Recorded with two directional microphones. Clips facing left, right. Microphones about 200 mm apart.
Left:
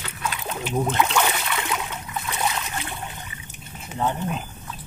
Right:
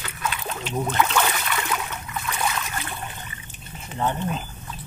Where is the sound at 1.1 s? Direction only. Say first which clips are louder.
Left 1 dB; 15° left (ahead or behind).